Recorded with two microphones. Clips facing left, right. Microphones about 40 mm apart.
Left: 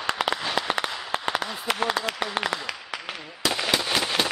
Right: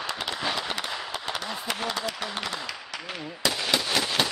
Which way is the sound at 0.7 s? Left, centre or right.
Left.